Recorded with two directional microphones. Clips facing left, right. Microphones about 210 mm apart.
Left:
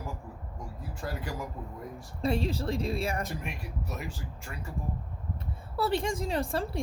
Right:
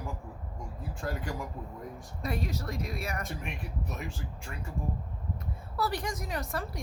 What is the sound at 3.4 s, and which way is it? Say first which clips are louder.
Speech: even; 5° left (ahead or behind).